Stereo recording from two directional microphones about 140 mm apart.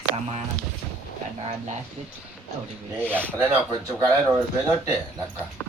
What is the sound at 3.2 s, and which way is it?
Speech, 15° right (ahead or behind).